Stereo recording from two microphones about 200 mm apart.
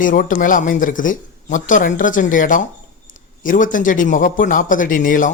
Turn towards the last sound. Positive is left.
turn(degrees=40)  # may be behind; listen again after turning